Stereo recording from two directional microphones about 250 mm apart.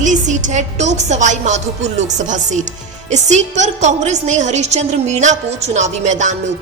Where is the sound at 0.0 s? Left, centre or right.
Right.